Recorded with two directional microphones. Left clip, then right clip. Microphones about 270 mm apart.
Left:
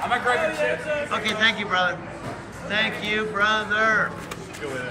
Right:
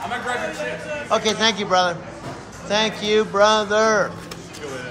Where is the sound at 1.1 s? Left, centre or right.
Centre.